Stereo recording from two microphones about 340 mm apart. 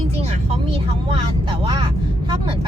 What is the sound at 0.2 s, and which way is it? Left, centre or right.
Vehicle, centre.